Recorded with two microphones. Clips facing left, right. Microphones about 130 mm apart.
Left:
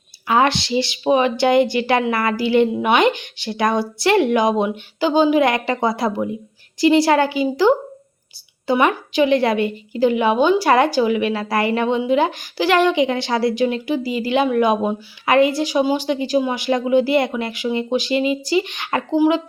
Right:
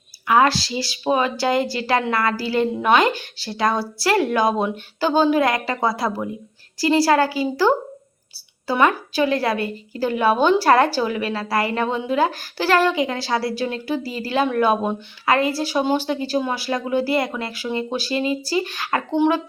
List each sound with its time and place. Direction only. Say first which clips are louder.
0.3 s a woman's voice: even; 25° left (ahead or behind)
19.1 s a woman's voice: left 3 dB; 5° left (ahead or behind)